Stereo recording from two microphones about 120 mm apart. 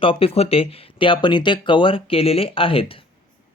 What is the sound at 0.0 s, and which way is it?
Speech, 50° left (ahead or behind).